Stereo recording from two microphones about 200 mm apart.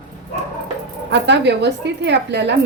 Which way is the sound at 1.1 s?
60° right (ahead or behind).